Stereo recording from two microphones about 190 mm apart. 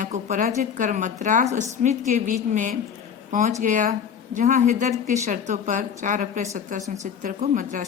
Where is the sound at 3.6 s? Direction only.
40° right (ahead or behind).